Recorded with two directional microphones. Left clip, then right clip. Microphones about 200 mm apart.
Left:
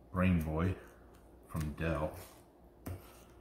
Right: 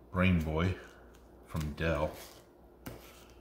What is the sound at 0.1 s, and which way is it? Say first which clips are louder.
Speech: right 3 dB; 30° right (ahead or behind).